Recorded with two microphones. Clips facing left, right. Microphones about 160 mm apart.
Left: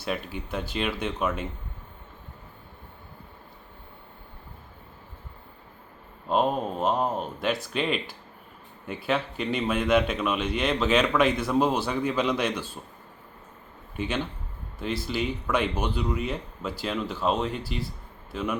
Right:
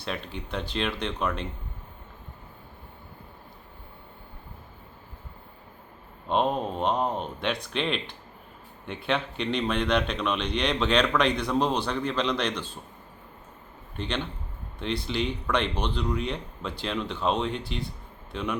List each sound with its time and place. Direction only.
0.0 s a man's voice: 5° left (ahead or behind)
6.2 s a man's voice: 5° left (ahead or behind)
13.9 s a man's voice: 10° left (ahead or behind)